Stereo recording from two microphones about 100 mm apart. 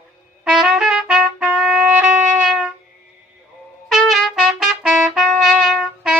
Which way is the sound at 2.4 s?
10° right (ahead or behind).